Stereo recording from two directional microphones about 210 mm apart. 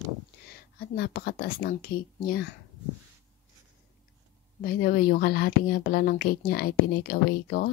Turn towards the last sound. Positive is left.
turn(degrees=45)  # may be behind; listen again after turning